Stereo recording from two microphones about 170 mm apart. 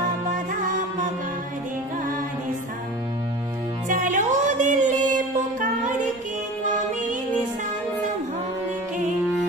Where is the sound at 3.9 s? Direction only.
50° right (ahead or behind).